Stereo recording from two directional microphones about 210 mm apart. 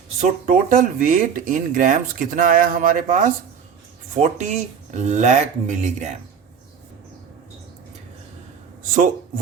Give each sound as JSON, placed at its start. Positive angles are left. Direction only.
{"t": 0.2, "sound": "speech", "side_deg": -40}